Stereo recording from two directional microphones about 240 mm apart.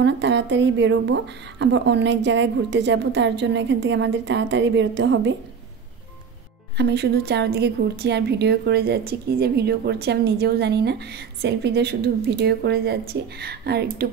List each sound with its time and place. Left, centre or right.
0.0 s a woman's voice: right
6.8 s a woman's voice: right